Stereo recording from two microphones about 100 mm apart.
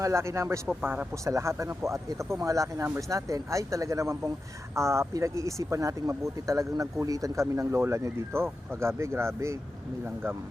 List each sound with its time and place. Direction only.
0.0 s speech: 30° right (ahead or behind)
0.8 s speech: 15° right (ahead or behind)
1.1 s speech: 30° right (ahead or behind)